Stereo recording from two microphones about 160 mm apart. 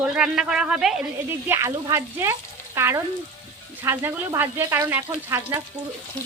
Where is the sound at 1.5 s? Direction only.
15° right (ahead or behind).